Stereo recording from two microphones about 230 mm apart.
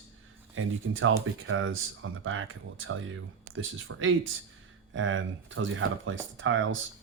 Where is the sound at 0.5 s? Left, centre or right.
Right.